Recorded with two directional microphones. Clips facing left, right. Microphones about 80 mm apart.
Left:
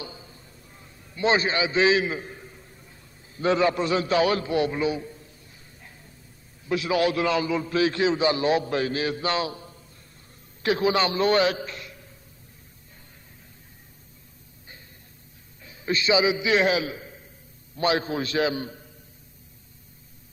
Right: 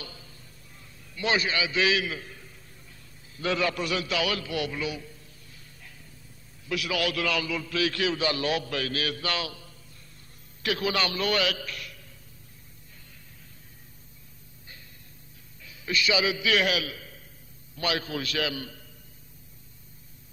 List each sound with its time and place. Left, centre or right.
0.0 s a sound: left
6.7 s a man's voice: left
15.6 s a man's voice: left